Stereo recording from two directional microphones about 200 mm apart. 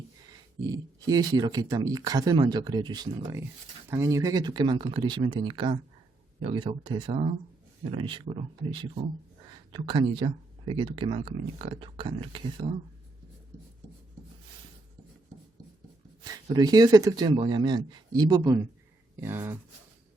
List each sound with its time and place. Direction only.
0.7 s speech: 20° right (ahead or behind)
16.2 s speech: 20° right (ahead or behind)